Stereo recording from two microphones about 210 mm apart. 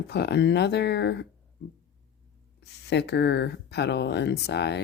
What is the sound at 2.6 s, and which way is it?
Speech, 55° left (ahead or behind).